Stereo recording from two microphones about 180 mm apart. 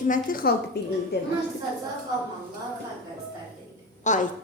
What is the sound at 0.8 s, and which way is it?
Speech, 65° left (ahead or behind).